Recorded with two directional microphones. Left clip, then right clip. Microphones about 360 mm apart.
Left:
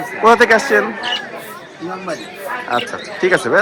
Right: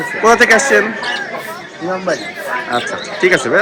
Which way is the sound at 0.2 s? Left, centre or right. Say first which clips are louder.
Right 1 dB; centre.